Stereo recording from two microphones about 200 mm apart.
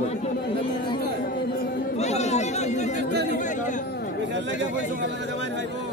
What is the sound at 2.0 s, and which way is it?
Chatter, 35° left (ahead or behind).